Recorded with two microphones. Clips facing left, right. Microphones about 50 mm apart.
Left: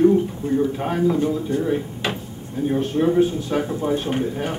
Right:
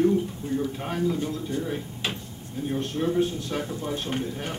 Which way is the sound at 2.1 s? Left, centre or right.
Centre.